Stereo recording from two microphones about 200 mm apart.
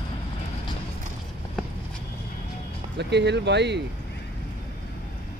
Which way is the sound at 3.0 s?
60° right (ahead or behind).